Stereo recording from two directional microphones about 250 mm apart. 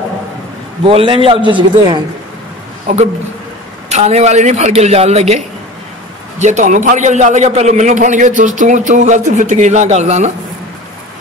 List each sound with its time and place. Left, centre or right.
0.8 s a man's voice: right
6.4 s a man's voice: right